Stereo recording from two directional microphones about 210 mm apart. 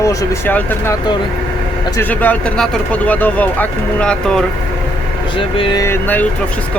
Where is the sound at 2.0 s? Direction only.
10° left (ahead or behind).